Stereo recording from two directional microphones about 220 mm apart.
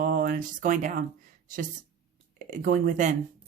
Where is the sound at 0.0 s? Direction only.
40° right (ahead or behind).